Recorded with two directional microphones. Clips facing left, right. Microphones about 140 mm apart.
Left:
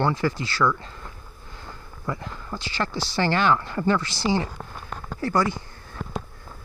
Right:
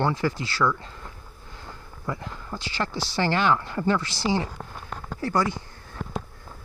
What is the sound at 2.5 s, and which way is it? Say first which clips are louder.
Speech: left 1 dB; 10° right (ahead or behind).